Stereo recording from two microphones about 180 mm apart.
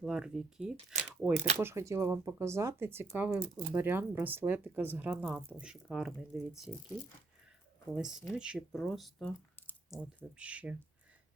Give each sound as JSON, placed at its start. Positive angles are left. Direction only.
{"t": 0.0, "sound": "speech", "side_deg": -5}
{"t": 1.6, "sound": "speech", "side_deg": -15}
{"t": 7.9, "sound": "speech", "side_deg": -5}
{"t": 10.0, "sound": "speech", "side_deg": -5}